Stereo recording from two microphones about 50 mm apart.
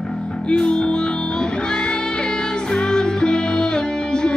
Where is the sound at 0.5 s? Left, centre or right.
Centre.